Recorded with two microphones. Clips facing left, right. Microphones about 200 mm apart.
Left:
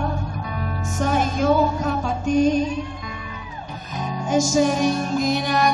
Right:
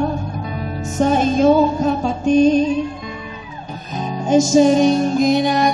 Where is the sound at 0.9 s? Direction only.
25° right (ahead or behind).